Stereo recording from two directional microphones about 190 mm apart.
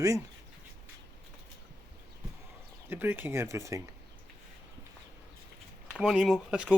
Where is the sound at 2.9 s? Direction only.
10° right (ahead or behind).